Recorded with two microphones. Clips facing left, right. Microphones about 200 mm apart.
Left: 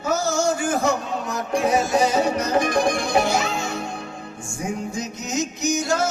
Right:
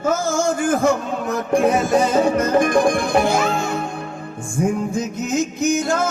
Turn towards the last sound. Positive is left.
turn(degrees=-55)  # may be behind; listen again after turning